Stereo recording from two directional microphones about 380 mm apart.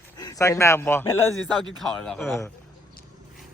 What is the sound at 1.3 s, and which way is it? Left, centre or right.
Speech, left.